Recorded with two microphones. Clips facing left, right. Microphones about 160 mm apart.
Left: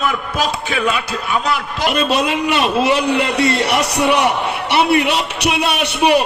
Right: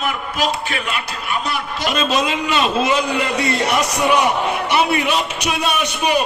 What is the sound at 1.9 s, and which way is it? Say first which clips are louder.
A man's voice: left 2 dB; 60° left (ahead or behind).